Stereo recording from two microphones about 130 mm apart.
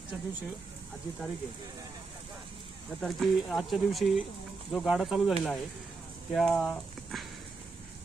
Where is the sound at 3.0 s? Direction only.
Centre (ahead or behind).